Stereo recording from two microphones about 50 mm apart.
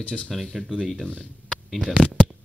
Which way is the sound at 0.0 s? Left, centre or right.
Left.